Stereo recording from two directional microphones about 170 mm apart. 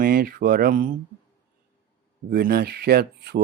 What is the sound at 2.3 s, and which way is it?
Speech, 60° right (ahead or behind).